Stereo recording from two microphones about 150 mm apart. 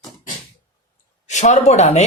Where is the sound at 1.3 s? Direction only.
50° left (ahead or behind).